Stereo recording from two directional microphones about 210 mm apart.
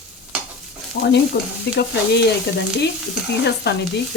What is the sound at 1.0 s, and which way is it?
Speech, 50° left (ahead or behind).